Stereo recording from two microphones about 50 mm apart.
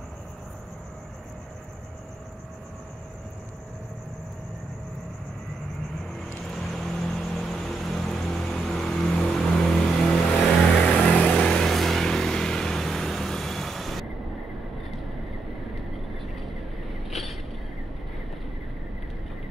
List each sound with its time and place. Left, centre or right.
6.5 s vehicle: centre
10.7 s music: left
11.3 s vehicle: left
11.6 s vehicle: centre
17.1 s vehicle: centre